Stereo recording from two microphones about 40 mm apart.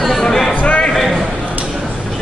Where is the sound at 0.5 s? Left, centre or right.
Left.